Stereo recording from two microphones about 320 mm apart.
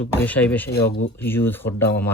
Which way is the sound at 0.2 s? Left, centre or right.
Centre.